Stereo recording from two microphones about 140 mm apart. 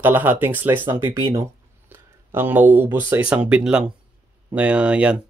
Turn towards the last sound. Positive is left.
turn(degrees=-10)  # may be behind; listen again after turning